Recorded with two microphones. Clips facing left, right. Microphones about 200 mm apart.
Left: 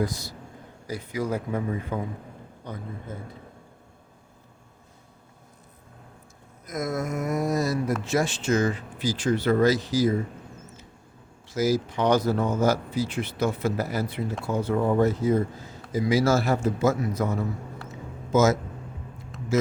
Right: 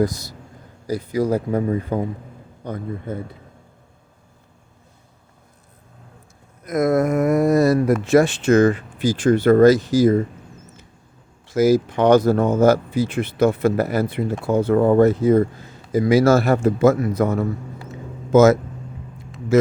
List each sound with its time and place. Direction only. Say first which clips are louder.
0.0 s speech: right 7 dB; 40° right (ahead or behind)
2.6 s speech: right 9 dB; 50° right (ahead or behind)
6.7 s speech: right 11 dB; 60° right (ahead or behind)
11.4 s speech: right 8 dB; 55° right (ahead or behind)